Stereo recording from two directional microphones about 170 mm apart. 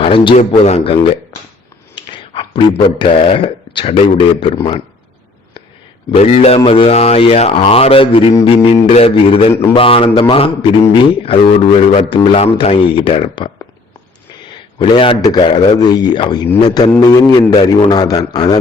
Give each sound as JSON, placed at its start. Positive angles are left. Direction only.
{"t": 0.0, "sound": "speech", "side_deg": 35}
{"t": 6.1, "sound": "speech", "side_deg": 40}
{"t": 14.8, "sound": "a man's voice", "side_deg": 30}